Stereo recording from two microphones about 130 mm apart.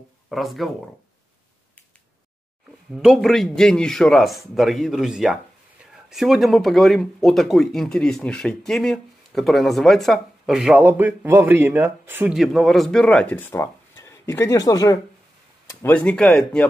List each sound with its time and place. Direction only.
0.3 s speech: centre (ahead or behind)
2.9 s speech: centre (ahead or behind)
12.4 s speech: centre (ahead or behind); by 15.0 s 30° left (ahead or behind)
15.7 s speech: 15° left (ahead or behind)